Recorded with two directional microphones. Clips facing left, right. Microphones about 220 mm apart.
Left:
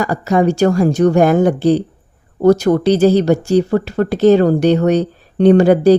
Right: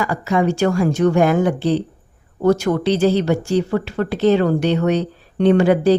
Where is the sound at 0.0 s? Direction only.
40° left (ahead or behind).